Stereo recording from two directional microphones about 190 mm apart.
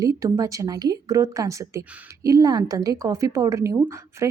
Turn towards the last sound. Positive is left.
turn(degrees=-15)  # may be behind; listen again after turning